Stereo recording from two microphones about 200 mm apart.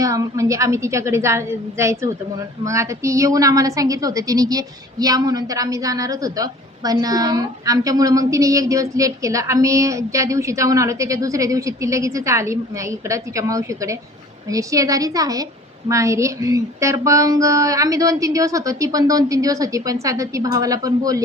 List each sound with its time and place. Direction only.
0.0 s a woman's voice: 15° right (ahead or behind)